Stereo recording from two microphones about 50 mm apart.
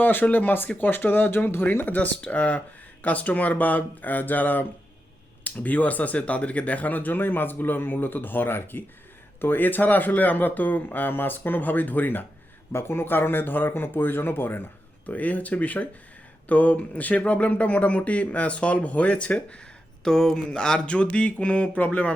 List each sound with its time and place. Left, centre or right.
0.0 s speech: left
12.7 s speech: left
15.0 s speech: left
20.1 s speech: centre; by 22.1 s left